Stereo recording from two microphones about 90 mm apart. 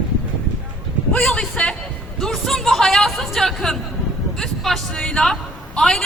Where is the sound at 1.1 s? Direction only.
5° left (ahead or behind).